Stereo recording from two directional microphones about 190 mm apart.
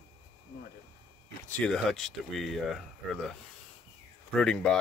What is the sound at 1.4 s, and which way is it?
Speech, 5° left (ahead or behind).